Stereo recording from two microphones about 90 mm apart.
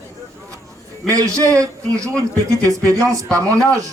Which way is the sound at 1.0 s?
40° right (ahead or behind).